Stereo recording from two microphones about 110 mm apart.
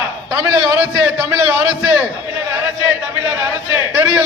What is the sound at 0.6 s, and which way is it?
A man's voice, 20° right (ahead or behind).